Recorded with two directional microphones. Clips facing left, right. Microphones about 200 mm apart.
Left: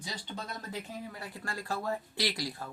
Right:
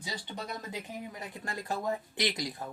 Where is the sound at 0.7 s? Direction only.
20° right (ahead or behind).